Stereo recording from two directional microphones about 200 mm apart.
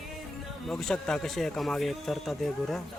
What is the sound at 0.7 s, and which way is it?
Speech, centre (ahead or behind).